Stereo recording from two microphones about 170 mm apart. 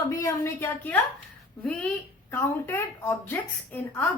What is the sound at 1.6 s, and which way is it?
A woman's voice, 5° left (ahead or behind).